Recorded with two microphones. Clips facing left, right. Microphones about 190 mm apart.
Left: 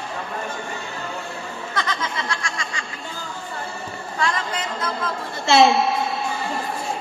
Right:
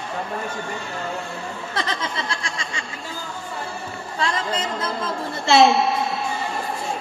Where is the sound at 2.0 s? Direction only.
30° right (ahead or behind).